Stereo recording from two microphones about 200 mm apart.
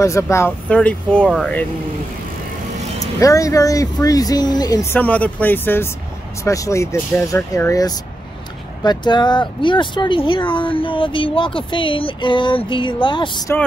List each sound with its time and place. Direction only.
0.0 s speech: 15° left (ahead or behind)
3.0 s speech: 15° left (ahead or behind)